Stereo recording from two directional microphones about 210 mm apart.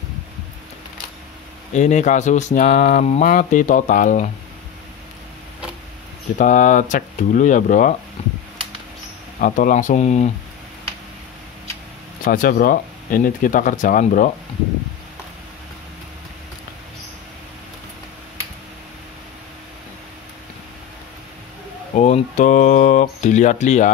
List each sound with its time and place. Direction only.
1.7 s speech: 35° left (ahead or behind)
6.3 s speech: 35° left (ahead or behind)
9.4 s speech: 40° left (ahead or behind)
12.3 s speech: 45° left (ahead or behind)
21.9 s speech: 35° left (ahead or behind)